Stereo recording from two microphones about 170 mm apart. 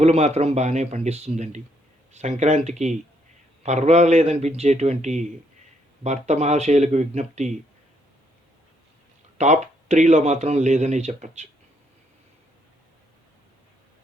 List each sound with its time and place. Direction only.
0.0 s a man's voice: 40° right (ahead or behind)
9.4 s speech: 45° right (ahead or behind)